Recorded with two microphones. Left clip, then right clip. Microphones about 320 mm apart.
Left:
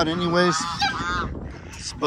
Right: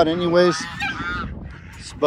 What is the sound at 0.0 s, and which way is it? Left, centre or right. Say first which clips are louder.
Speech: right 4 dB; centre.